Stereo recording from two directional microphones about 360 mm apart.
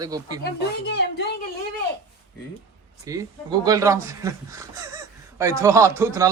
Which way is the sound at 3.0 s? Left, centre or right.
Centre.